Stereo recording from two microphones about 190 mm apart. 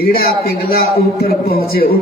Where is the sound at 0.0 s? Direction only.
55° left (ahead or behind).